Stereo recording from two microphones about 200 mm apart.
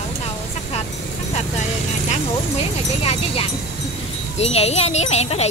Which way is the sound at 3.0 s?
30° left (ahead or behind).